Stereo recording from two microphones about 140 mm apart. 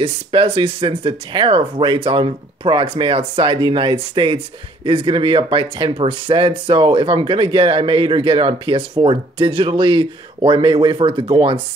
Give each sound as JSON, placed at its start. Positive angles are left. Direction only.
{"t": 0.0, "sound": "speech", "side_deg": -40}